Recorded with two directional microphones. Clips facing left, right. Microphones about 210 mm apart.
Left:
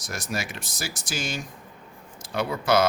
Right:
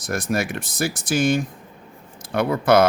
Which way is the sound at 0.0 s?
55° right (ahead or behind).